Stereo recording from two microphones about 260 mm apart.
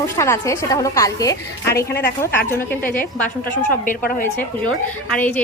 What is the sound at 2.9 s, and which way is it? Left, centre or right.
Speech, left.